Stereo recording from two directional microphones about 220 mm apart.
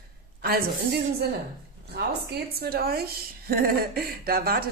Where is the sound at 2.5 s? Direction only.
45° right (ahead or behind).